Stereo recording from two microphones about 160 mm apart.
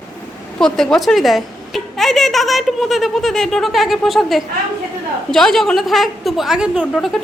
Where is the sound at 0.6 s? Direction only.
5° left (ahead or behind).